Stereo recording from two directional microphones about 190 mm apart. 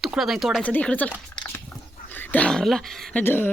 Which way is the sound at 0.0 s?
Centre (ahead or behind).